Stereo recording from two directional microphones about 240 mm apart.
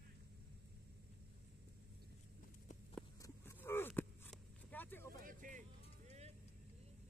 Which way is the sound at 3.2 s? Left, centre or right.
Centre.